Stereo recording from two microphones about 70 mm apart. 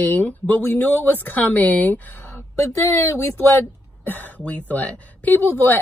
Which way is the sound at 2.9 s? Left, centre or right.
Left.